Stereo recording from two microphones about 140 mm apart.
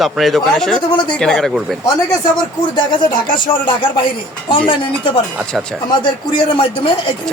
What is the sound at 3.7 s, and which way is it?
Speech, 35° left (ahead or behind).